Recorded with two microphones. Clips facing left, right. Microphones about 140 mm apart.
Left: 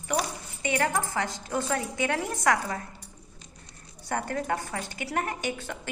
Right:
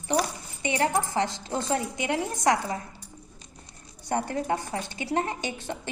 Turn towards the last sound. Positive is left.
turn(degrees=-20)  # may be behind; listen again after turning